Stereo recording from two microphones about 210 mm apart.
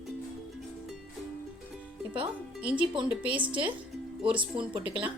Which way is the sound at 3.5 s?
25° right (ahead or behind).